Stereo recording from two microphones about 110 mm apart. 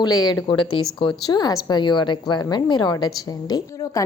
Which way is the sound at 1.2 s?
35° left (ahead or behind).